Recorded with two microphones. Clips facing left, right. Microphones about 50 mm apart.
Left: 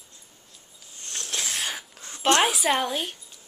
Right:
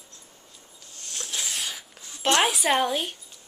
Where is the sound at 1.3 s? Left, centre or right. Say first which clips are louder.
Left 2 dB; left.